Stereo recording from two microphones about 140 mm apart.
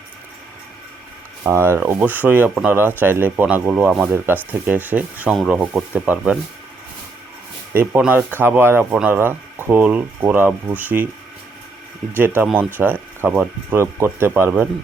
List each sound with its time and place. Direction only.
1.5 s speech: 15° right (ahead or behind)
7.7 s speech: 15° right (ahead or behind)
12.1 s speech: 15° right (ahead or behind)